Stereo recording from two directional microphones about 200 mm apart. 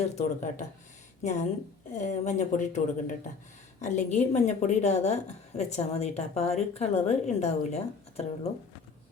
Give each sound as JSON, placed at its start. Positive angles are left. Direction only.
{"t": 0.2, "sound": "a woman's voice", "side_deg": 35}